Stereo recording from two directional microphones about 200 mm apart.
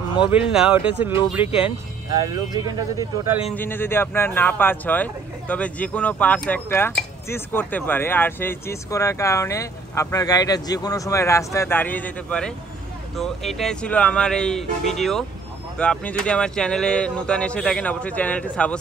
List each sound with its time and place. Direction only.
0.3 s speech: 5° right (ahead or behind)
2.1 s speech: 20° right (ahead or behind)
3.5 s speech: 10° left (ahead or behind)